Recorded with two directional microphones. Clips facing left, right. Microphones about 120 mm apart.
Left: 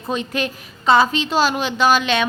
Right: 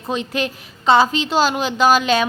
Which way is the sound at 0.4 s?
25° right (ahead or behind).